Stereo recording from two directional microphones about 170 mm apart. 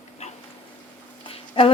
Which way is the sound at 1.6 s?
30° left (ahead or behind).